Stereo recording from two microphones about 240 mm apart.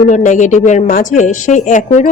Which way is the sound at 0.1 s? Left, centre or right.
Left.